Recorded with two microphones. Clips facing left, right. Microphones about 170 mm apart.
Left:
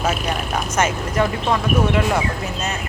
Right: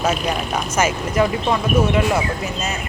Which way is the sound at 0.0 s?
Centre (ahead or behind).